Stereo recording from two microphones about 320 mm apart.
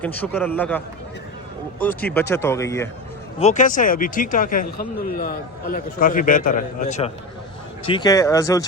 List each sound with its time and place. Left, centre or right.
0.0 s a man's voice: centre
1.8 s speech: centre
3.3 s speech: left